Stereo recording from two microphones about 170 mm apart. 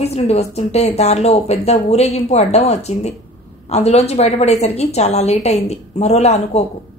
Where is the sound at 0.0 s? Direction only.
40° left (ahead or behind).